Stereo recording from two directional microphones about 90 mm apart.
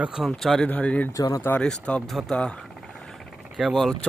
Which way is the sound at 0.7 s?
15° left (ahead or behind).